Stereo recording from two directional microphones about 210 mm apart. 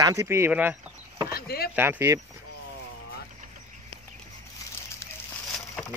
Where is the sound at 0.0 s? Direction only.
15° right (ahead or behind).